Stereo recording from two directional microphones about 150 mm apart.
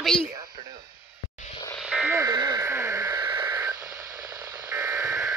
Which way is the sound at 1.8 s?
5° right (ahead or behind).